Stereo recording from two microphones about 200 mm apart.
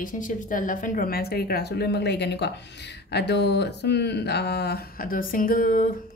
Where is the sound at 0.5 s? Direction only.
40° left (ahead or behind).